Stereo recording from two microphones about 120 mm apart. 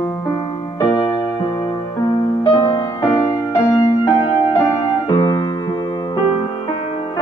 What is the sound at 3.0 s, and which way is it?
Music, 30° left (ahead or behind).